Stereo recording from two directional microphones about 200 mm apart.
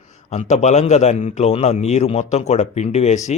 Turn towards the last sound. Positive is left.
turn(degrees=35)  # may be behind; listen again after turning